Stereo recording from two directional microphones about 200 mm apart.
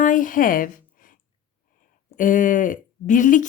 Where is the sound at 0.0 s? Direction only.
40° left (ahead or behind).